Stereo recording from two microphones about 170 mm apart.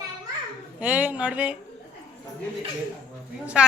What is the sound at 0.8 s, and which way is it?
Speech, 10° right (ahead or behind).